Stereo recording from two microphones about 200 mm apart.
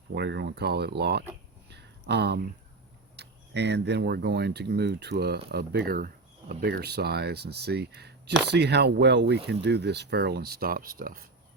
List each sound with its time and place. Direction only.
0.1 s speech: 55° right (ahead or behind)
1.7 s a sound: 60° right (ahead or behind)
3.2 s speech: 60° right (ahead or behind)